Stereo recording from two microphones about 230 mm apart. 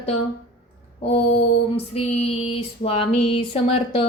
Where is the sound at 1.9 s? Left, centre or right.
Left.